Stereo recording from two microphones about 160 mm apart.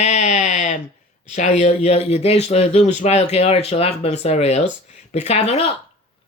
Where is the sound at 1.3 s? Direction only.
45° left (ahead or behind).